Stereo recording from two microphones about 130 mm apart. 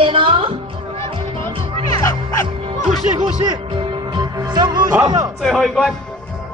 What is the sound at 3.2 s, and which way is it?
Speech, 35° right (ahead or behind).